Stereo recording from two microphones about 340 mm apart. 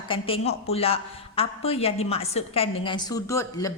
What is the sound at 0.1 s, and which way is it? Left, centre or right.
A woman's voice, centre.